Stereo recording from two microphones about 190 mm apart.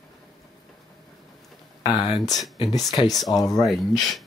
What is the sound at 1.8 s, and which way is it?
Speech, 25° left (ahead or behind).